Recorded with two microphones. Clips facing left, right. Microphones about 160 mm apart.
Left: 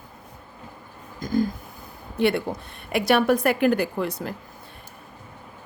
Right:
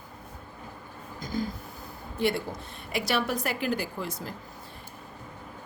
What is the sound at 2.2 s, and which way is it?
A woman's voice, 65° left (ahead or behind).